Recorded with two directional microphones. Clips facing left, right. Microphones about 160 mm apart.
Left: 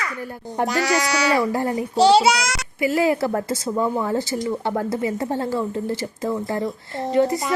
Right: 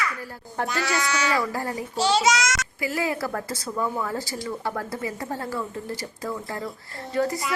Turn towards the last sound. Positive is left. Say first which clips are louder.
# left 6 dB
turn(degrees=20)  # may be behind; listen again after turning